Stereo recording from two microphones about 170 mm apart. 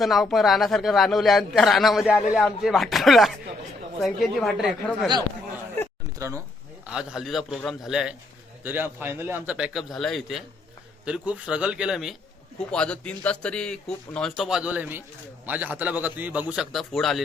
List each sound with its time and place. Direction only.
0.0 s speech: centre (ahead or behind)
6.1 s speech: 15° right (ahead or behind)
6.8 s a man's voice: 5° right (ahead or behind)